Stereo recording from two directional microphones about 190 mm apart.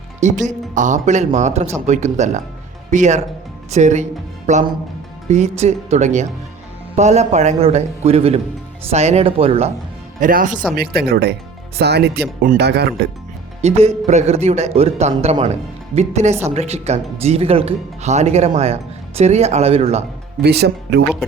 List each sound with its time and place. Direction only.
0.4 s speech: 40° right (ahead or behind)
10.2 s speech: 45° right (ahead or behind)
10.5 s speech: 5° right (ahead or behind)
10.8 s speech: 55° right (ahead or behind)
13.6 s speech: 35° right (ahead or behind)
20.4 s speech: 60° right (ahead or behind)